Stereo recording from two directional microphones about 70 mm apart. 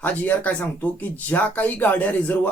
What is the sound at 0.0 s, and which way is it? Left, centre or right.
Speech, left.